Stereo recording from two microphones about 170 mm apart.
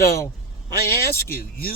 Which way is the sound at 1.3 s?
60° left (ahead or behind).